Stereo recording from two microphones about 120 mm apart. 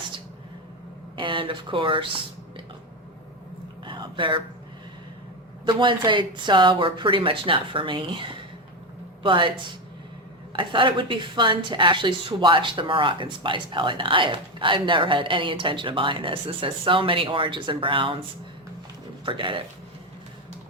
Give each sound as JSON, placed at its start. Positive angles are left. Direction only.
{"t": 1.1, "sound": "a woman's voice", "side_deg": -45}
{"t": 3.8, "sound": "a sound", "side_deg": -40}
{"t": 5.6, "sound": "a woman's voice", "side_deg": -40}
{"t": 10.5, "sound": "a woman's voice", "side_deg": -45}
{"t": 19.2, "sound": "a woman's voice", "side_deg": -45}